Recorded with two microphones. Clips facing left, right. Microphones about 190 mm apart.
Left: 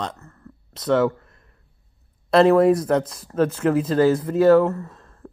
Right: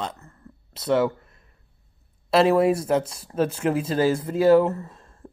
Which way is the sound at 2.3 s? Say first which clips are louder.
Left 4 dB; 10° right (ahead or behind).